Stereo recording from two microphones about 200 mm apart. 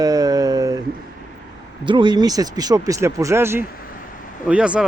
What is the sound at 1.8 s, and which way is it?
Speech, 25° right (ahead or behind).